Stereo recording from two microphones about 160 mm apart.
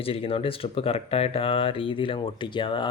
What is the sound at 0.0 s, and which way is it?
Speech, 35° left (ahead or behind).